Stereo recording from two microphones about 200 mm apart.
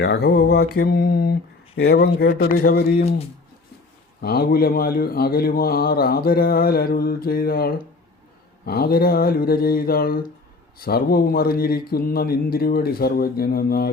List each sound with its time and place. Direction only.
0.0 s speech: 55° left (ahead or behind)
4.2 s speech: 50° left (ahead or behind)